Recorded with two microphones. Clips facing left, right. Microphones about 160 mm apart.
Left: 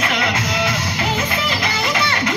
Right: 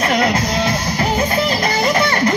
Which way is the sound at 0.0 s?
35° right (ahead or behind).